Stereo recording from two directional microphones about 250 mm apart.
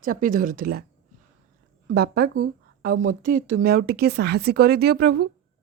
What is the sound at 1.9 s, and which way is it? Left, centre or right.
A woman's voice, right.